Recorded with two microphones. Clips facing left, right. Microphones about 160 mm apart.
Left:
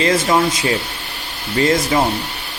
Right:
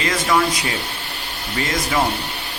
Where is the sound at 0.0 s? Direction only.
30° left (ahead or behind).